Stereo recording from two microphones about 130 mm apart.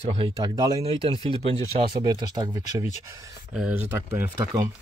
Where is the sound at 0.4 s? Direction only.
30° right (ahead or behind).